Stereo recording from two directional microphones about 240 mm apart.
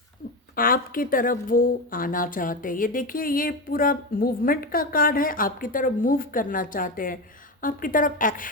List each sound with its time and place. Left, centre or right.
0.5 s speech: left